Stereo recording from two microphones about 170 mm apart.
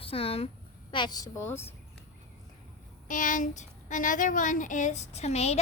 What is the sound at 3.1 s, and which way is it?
Speech, 50° left (ahead or behind).